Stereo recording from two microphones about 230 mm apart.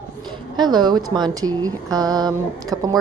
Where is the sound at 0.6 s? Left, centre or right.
Centre.